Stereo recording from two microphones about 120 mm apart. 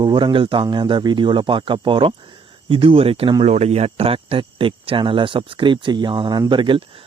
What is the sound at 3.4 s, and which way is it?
Speech, 60° right (ahead or behind).